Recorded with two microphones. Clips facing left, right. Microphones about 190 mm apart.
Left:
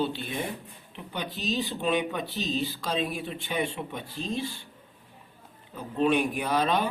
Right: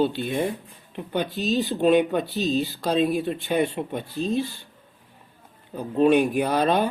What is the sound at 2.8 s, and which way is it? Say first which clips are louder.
Speech: right 7 dB; 60° right (ahead or behind).